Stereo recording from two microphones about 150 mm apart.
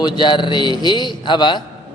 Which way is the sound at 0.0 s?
30° left (ahead or behind).